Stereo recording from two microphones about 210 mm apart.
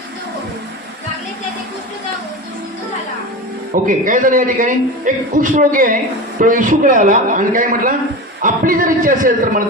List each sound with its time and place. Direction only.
3.8 s a man's voice: 40° right (ahead or behind)